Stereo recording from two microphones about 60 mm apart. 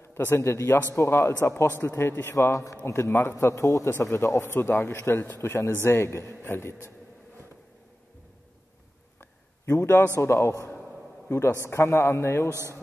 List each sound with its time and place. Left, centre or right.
0.0 s a man's voice: left
2.3 s a man's voice: left
2.8 s a man's voice: left
4.0 s a man's voice: left
5.4 s a man's voice: left
9.2 s a sound: left
10.1 s a man's voice: left
12.4 s speech: right